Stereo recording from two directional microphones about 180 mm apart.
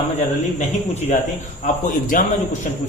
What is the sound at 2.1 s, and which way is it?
Speech, 50° left (ahead or behind).